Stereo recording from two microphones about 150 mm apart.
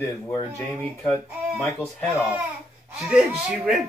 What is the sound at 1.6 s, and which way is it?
Speech, 15° left (ahead or behind).